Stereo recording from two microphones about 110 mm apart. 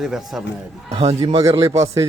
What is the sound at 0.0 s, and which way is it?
Speech, 5° right (ahead or behind).